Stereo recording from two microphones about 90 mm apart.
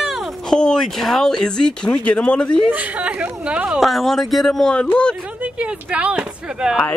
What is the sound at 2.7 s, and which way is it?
Speech, 15° right (ahead or behind).